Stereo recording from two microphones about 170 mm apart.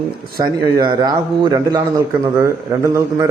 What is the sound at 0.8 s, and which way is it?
A man's voice, 25° right (ahead or behind).